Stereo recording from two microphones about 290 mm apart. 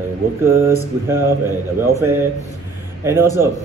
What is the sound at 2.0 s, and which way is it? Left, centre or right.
Speech, centre.